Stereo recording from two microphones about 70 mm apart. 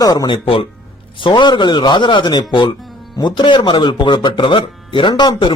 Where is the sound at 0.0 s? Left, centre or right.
Left.